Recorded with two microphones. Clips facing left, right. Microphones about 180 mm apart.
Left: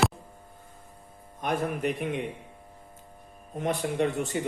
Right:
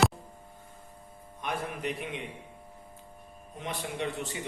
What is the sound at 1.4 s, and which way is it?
Speech, 45° left (ahead or behind).